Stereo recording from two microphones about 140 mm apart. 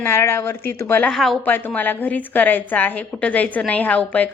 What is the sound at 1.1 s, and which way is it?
Speech, centre (ahead or behind).